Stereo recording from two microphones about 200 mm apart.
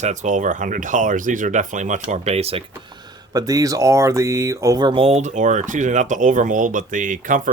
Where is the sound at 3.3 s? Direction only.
15° right (ahead or behind).